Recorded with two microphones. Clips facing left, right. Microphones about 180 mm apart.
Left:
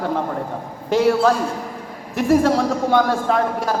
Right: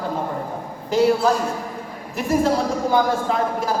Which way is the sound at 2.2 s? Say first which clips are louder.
Left 4 dB; 70° left (ahead or behind).